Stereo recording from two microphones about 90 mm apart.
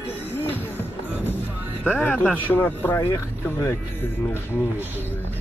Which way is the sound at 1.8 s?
15° left (ahead or behind).